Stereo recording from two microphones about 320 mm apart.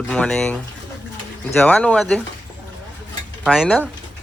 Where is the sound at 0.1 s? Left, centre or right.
Centre.